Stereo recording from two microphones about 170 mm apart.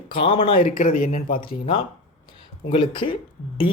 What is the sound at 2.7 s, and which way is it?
Speech, 30° left (ahead or behind).